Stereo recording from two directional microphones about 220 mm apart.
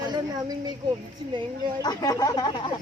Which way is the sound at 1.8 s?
15° left (ahead or behind).